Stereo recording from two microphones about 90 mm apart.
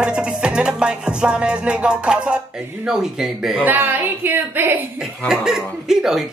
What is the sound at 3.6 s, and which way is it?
A woman's voice, 20° right (ahead or behind).